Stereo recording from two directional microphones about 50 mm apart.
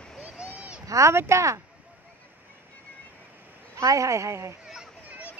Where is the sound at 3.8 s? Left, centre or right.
Right.